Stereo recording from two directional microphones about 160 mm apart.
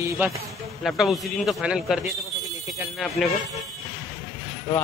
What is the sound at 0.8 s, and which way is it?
Speech, centre (ahead or behind).